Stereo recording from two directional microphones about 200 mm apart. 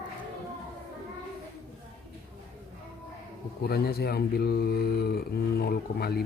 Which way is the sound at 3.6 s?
50° left (ahead or behind).